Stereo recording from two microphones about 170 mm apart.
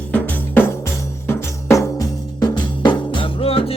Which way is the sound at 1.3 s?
15° left (ahead or behind).